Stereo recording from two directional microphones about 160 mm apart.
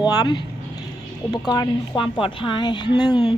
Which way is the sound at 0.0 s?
25° left (ahead or behind).